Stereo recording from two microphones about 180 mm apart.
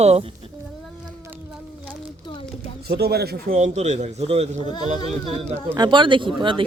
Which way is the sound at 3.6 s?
40° right (ahead or behind).